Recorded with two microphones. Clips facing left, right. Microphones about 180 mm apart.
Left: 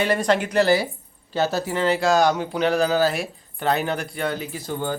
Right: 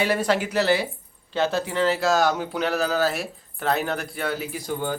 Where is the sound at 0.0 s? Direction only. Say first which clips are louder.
Left 2 dB; 5° right (ahead or behind).